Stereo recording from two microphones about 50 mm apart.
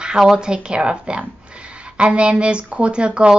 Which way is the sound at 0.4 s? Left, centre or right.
Centre.